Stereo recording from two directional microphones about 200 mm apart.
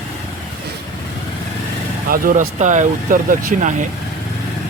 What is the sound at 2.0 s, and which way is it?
Speech, 45° right (ahead or behind).